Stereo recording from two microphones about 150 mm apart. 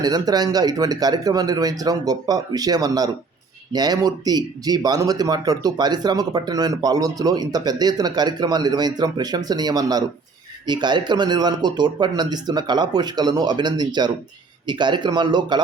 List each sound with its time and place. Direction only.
0.0 s speech: 25° right (ahead or behind)